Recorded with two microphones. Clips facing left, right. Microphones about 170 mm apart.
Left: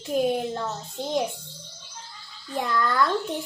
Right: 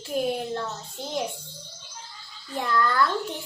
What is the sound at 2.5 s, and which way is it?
Child singing, 20° left (ahead or behind).